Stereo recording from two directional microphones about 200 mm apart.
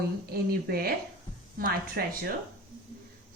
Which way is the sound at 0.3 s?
50° right (ahead or behind).